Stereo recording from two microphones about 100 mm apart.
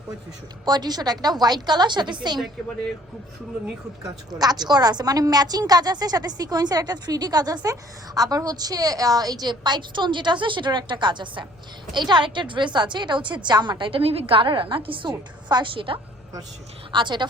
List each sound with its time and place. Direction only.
0.6 s a woman's voice: 45° right (ahead or behind)
4.3 s a woman's voice: 40° right (ahead or behind)